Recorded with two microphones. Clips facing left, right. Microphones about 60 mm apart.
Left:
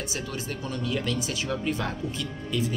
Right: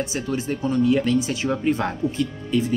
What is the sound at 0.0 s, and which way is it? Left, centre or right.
Speech, right.